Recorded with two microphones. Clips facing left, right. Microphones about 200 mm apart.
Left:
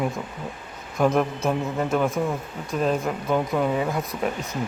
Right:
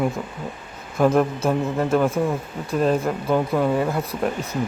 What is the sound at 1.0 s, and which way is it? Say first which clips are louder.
Speech: right 3 dB; centre (ahead or behind).